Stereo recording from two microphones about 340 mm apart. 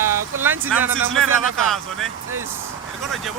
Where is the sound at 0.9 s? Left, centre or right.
Right.